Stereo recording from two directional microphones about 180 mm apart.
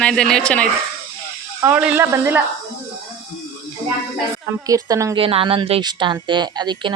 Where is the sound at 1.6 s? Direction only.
10° right (ahead or behind).